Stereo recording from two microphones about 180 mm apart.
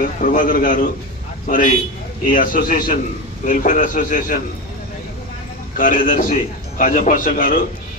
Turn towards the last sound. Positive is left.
turn(degrees=50)  # may be behind; listen again after turning